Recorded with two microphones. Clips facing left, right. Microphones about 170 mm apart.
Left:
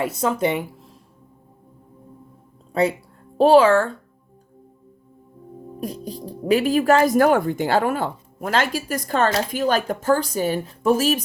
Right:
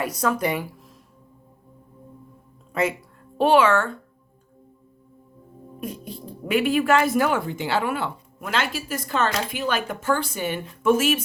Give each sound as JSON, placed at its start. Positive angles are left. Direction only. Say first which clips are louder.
{"t": 0.0, "sound": "speech", "louder": "left 2 dB", "side_deg": 25}
{"t": 3.3, "sound": "speech", "louder": "left 4 dB", "side_deg": 35}
{"t": 5.8, "sound": "speech", "louder": "left 3 dB", "side_deg": 35}